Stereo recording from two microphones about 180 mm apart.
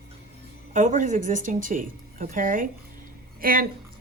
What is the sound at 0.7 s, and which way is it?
Speech, 45° right (ahead or behind).